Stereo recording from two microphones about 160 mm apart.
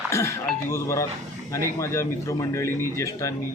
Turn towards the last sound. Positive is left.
turn(degrees=20)  # may be behind; listen again after turning